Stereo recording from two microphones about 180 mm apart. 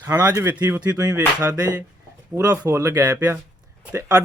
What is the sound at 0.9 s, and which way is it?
Speech, 20° right (ahead or behind).